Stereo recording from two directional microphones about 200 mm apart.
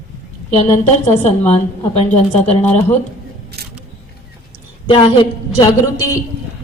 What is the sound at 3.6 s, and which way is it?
Single-lens reflex camera, 55° right (ahead or behind).